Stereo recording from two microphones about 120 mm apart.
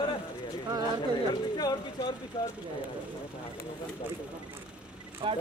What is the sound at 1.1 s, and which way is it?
Speech, 35° left (ahead or behind).